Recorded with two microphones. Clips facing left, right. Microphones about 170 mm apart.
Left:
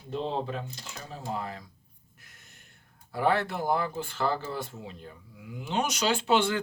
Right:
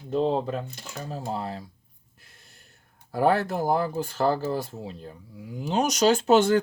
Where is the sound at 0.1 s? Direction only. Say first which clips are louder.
Right 7 dB; 45° right (ahead or behind).